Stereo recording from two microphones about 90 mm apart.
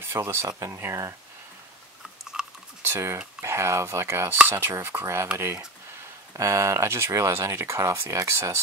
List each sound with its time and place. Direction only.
0.0 s speech: 25° right (ahead or behind)
2.3 s a sound: 10° right (ahead or behind)
2.9 s speech: 30° right (ahead or behind)
6.3 s speech: 35° right (ahead or behind)